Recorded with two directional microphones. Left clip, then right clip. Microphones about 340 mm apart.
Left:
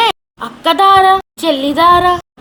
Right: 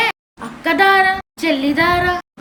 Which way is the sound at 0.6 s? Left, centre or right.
Centre.